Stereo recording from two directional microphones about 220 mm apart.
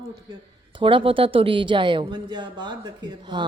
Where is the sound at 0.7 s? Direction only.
25° right (ahead or behind).